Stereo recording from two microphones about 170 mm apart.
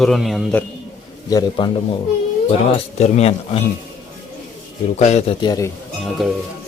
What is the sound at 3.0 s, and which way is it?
Speech, 40° left (ahead or behind).